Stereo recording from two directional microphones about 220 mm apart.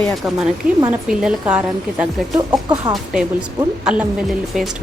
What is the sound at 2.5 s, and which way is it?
Speech, 15° right (ahead or behind).